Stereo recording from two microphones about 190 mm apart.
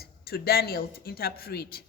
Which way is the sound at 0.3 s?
55° left (ahead or behind).